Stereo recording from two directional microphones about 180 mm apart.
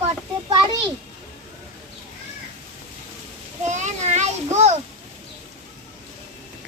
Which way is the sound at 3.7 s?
40° right (ahead or behind).